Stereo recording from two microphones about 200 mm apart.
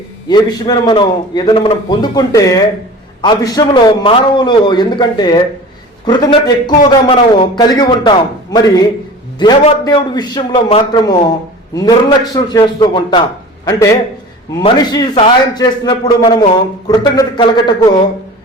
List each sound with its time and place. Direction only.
0.3 s a man's voice: 20° left (ahead or behind)